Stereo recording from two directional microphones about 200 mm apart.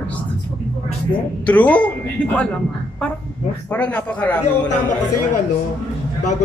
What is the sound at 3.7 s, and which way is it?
Speech, 5° left (ahead or behind).